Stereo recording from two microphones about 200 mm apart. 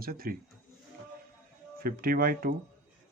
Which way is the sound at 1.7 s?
45° right (ahead or behind).